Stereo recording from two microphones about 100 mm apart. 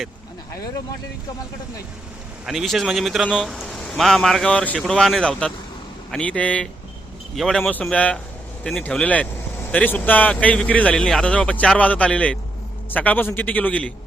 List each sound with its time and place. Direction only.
2.5 s speech: centre (ahead or behind); by 13.9 s 15° left (ahead or behind)